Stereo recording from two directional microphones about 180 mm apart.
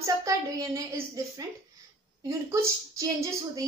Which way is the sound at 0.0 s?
20° right (ahead or behind).